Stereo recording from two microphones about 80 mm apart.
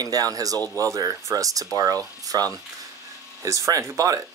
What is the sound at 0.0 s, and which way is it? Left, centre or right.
Speech, right.